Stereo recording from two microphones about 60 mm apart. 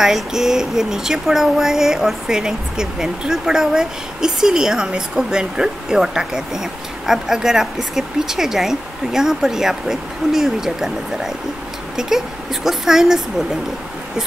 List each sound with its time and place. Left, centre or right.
0.0 s speech: centre